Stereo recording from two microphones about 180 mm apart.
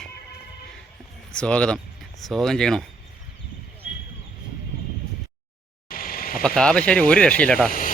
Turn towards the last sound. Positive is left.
turn(degrees=50)  # may be behind; listen again after turning